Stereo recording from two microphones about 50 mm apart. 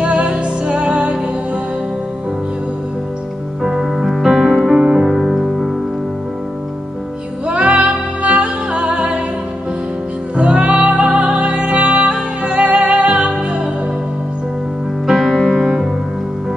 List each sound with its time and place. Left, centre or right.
0.0 s music: right
3.6 s music: centre
7.4 s music: right
10.3 s music: right
15.0 s music: centre